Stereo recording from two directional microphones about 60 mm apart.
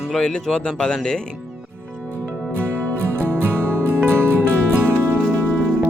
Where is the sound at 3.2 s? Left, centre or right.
Right.